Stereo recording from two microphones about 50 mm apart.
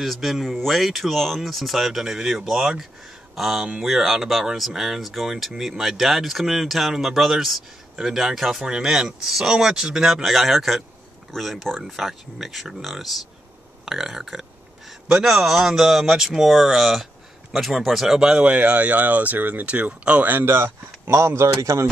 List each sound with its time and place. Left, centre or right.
0.0 s speech: centre
18.2 s speech: centre
20.2 s speech: right